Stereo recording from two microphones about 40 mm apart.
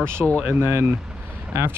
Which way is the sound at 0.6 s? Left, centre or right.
Right.